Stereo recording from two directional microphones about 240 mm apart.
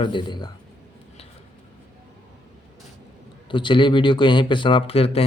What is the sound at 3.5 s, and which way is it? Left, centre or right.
Speech, centre.